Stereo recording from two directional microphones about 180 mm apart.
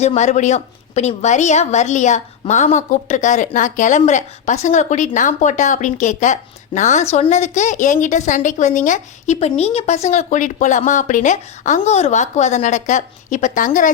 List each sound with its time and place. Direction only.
0.0 s a woman's voice: 40° left (ahead or behind)